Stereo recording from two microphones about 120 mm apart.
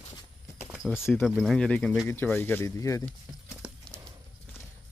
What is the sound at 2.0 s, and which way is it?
Speech, 20° left (ahead or behind).